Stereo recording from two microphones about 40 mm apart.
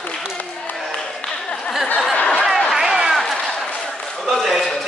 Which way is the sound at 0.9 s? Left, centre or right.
Centre.